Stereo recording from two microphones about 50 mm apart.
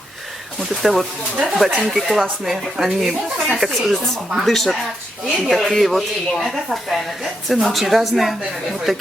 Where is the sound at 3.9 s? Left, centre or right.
Centre.